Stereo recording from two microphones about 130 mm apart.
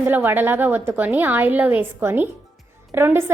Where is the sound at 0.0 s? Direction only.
15° right (ahead or behind).